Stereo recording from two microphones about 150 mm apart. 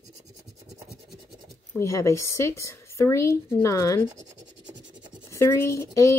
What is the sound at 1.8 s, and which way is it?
Speech, 20° left (ahead or behind).